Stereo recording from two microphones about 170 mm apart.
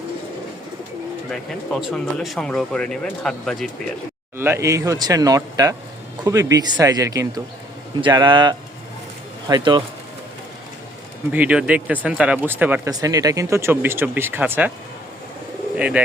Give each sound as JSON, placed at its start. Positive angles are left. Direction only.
{"t": 1.3, "sound": "speech", "side_deg": 0}
{"t": 4.4, "sound": "speech", "side_deg": -15}
{"t": 11.3, "sound": "speech", "side_deg": -10}
{"t": 12.9, "sound": "speech", "side_deg": -20}